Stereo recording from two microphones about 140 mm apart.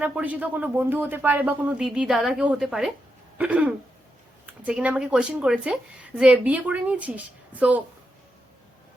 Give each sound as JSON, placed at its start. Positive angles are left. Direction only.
{"t": 0.0, "sound": "a woman's voice", "side_deg": -10}